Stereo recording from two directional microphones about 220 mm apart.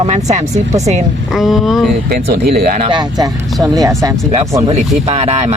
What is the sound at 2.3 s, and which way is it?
Speech, 45° right (ahead or behind).